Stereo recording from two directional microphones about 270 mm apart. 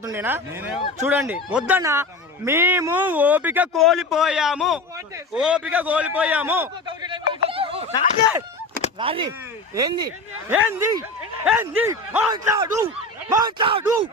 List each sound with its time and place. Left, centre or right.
0.0 s a man's voice: centre
6.1 s a sound: centre
9.0 s speech: centre